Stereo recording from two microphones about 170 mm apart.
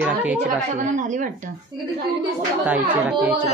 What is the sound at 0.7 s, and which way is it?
Speech, 45° right (ahead or behind).